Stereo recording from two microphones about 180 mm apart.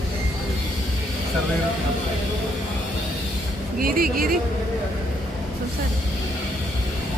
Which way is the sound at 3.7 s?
55° right (ahead or behind).